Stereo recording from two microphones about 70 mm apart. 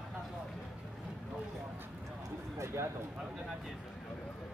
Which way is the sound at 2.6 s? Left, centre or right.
Right.